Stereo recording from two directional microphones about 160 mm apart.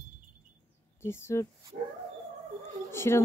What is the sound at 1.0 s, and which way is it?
Speech, 15° left (ahead or behind).